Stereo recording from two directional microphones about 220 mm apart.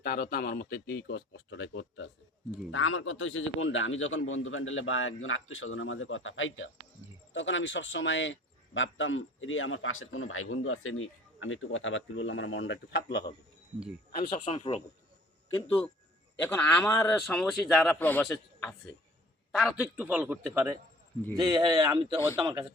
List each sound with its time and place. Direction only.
0.0 s a man's voice: 45° left (ahead or behind)
14.2 s speech: 30° left (ahead or behind)
16.4 s a man's voice: 5° left (ahead or behind); by 22.6 s 20° right (ahead or behind)